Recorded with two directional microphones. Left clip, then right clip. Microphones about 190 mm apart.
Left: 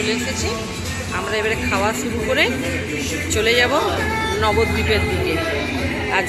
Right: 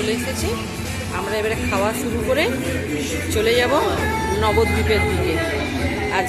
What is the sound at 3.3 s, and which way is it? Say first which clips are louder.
Speech: left 1 dB; 10° right (ahead or behind).